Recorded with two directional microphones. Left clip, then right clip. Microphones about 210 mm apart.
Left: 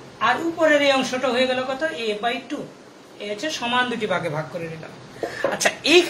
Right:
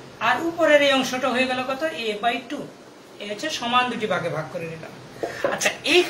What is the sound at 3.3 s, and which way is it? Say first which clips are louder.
Speech: right 1 dB; 25° left (ahead or behind).